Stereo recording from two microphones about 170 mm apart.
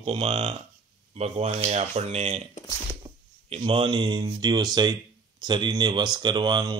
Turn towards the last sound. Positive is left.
turn(degrees=-25)  # may be behind; listen again after turning